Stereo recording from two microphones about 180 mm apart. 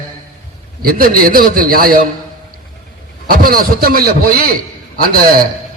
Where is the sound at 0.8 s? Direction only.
55° right (ahead or behind).